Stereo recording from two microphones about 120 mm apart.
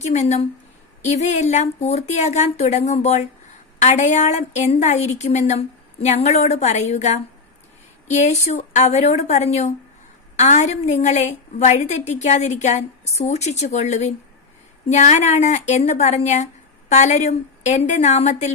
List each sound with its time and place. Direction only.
0.0 s a woman's voice: 70° left (ahead or behind)